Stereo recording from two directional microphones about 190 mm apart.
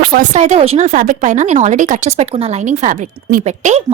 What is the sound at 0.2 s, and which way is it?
Speech, 40° right (ahead or behind).